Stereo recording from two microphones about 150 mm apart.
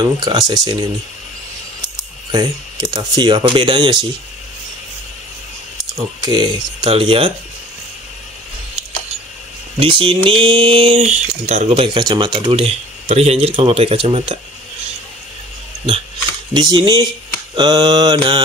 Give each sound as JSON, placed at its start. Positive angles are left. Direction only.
{"t": 0.0, "sound": "mantra", "side_deg": -30}
{"t": 2.3, "sound": "speech", "side_deg": -25}
{"t": 6.2, "sound": "mantra", "side_deg": -30}
{"t": 6.8, "sound": "speech", "side_deg": -40}
{"t": 9.8, "sound": "speech", "side_deg": -35}
{"t": 16.5, "sound": "mantra", "side_deg": -30}